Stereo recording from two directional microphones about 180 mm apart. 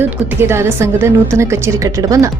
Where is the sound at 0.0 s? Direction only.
10° right (ahead or behind).